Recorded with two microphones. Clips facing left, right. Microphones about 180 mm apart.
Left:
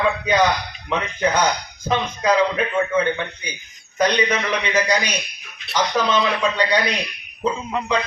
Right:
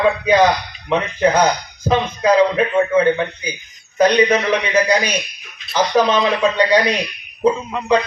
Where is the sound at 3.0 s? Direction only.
35° right (ahead or behind).